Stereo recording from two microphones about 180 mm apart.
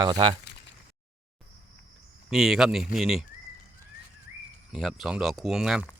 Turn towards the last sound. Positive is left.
turn(degrees=-5)  # may be behind; listen again after turning